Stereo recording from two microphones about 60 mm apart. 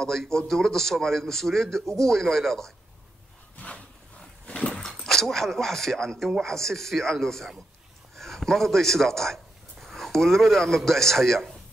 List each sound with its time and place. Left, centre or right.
0.0 s a man's voice: centre
3.5 s a sound: left
4.5 s dog: centre
4.8 s a man's voice: centre